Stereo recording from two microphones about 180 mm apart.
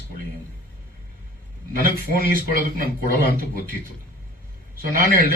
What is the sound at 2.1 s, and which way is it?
A man's voice, 55° right (ahead or behind).